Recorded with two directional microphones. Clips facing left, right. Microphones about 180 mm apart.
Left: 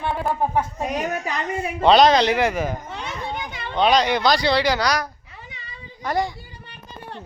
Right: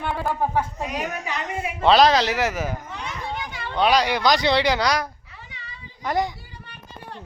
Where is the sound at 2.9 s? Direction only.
25° left (ahead or behind).